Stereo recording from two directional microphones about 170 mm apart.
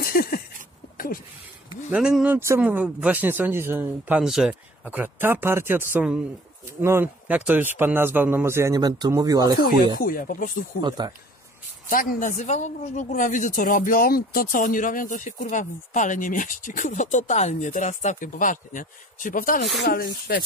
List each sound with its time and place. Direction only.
0.0 s a sound: 60° left (ahead or behind)
1.9 s speech: 5° right (ahead or behind); by 9.6 s 20° right (ahead or behind)
9.9 s speech: 55° left (ahead or behind)
10.8 s speech: 25° right (ahead or behind)
11.9 s speech: 50° left (ahead or behind)